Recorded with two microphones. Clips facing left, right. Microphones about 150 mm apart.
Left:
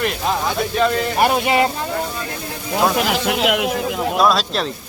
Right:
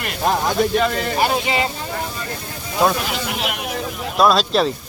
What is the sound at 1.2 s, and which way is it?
Speech, 55° left (ahead or behind).